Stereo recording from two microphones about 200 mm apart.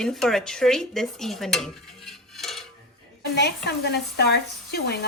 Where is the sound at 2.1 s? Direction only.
Centre (ahead or behind).